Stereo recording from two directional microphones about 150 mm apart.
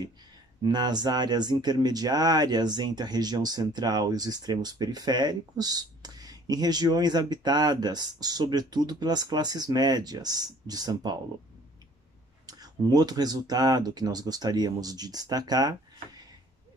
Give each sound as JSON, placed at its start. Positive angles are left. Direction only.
{"t": 0.6, "sound": "speech", "side_deg": -30}
{"t": 12.4, "sound": "speech", "side_deg": -25}